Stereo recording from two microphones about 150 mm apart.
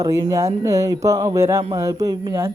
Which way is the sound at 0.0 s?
20° right (ahead or behind).